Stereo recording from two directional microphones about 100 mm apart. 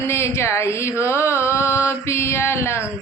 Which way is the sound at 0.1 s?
25° left (ahead or behind).